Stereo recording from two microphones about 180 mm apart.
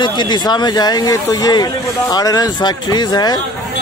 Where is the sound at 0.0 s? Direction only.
25° left (ahead or behind).